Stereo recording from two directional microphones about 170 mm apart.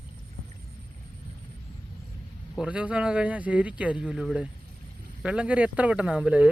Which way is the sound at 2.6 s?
5° right (ahead or behind).